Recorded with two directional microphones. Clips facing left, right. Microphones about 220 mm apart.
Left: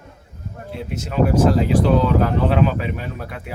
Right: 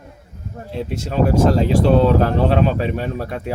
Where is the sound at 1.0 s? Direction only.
35° right (ahead or behind).